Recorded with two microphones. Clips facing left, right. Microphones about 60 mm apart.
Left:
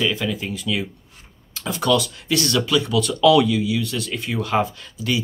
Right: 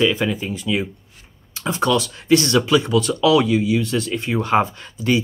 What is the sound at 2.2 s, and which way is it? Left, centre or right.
Speech, right.